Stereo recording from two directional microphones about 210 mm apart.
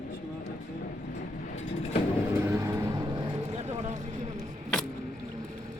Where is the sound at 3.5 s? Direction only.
30° right (ahead or behind).